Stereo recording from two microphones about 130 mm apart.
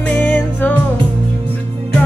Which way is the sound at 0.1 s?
15° left (ahead or behind).